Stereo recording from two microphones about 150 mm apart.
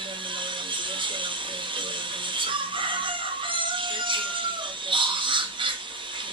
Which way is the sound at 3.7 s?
35° right (ahead or behind).